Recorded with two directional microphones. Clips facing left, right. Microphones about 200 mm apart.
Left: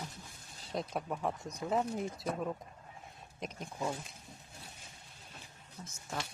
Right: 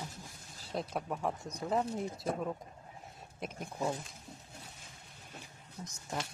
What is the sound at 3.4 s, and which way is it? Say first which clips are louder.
Speech: right 1 dB; 5° right (ahead or behind).